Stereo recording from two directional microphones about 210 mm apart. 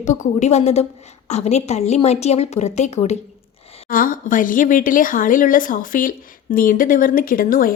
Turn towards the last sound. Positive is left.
turn(degrees=40)  # may be behind; listen again after turning